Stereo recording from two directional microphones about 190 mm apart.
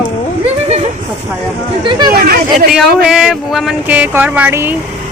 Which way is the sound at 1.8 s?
25° right (ahead or behind).